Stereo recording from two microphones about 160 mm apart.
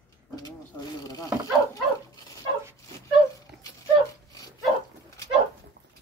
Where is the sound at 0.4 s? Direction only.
20° left (ahead or behind).